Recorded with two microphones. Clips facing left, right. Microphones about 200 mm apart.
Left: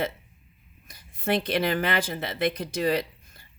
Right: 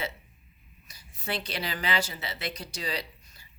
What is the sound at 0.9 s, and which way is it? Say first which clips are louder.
Speech: left 9 dB; 55° left (ahead or behind).